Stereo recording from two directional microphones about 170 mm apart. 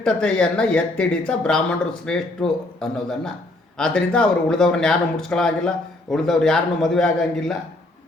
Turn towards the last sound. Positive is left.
turn(degrees=5)  # may be behind; listen again after turning